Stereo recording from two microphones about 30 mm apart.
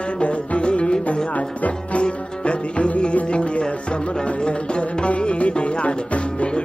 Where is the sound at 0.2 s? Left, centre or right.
Left.